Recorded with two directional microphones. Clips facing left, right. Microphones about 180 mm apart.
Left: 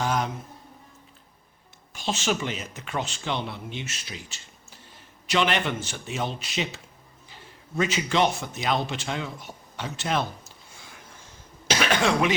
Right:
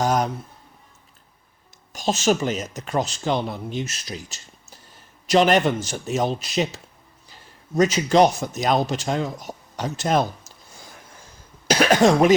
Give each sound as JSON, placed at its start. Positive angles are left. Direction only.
{"t": 0.0, "sound": "speech", "side_deg": -40}
{"t": 1.9, "sound": "speech", "side_deg": -40}
{"t": 7.8, "sound": "speech", "side_deg": -40}
{"t": 11.7, "sound": "cough", "side_deg": -40}